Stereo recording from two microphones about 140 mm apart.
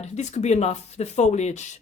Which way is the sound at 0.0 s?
55° left (ahead or behind).